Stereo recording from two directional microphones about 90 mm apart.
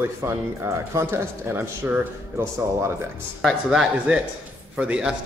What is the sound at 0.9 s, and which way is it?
Speech, 25° right (ahead or behind).